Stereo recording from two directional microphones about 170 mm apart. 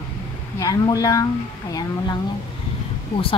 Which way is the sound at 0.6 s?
20° left (ahead or behind).